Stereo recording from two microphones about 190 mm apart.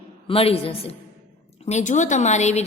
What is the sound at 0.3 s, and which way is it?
A woman's voice, 30° left (ahead or behind).